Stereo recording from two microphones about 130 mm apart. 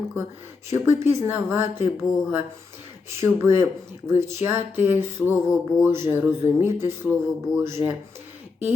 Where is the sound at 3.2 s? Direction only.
20° right (ahead or behind).